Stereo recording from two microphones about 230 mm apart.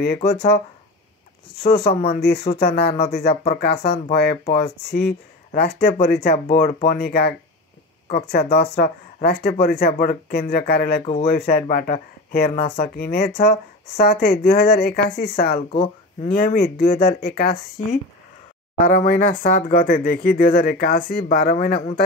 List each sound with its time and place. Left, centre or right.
0.0 s speech: left
1.6 s speech: left
15.7 s speech: left
16.5 s speech: left
18.8 s speech: left